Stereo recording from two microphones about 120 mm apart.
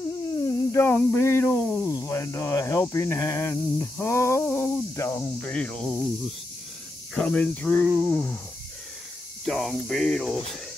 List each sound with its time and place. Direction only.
0.4 s a sound: 25° left (ahead or behind)
2.0 s speech: 25° left (ahead or behind)
5.5 s speech: 10° left (ahead or behind)
7.2 s speech: 5° left (ahead or behind)
9.4 s speech: centre (ahead or behind)